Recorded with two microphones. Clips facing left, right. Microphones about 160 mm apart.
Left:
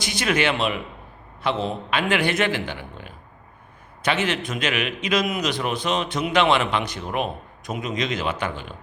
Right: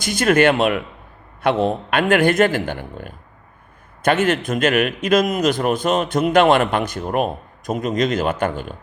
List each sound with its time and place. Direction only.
0.0 s a man's voice: 50° right (ahead or behind)